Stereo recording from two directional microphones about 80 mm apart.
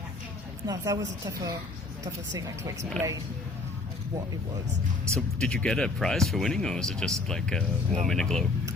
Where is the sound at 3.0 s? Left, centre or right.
Centre.